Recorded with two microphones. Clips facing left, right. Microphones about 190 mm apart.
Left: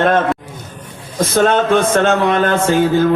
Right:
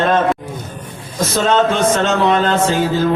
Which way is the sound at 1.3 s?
55° left (ahead or behind).